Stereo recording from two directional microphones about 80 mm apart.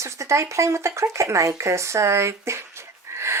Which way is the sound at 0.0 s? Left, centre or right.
Right.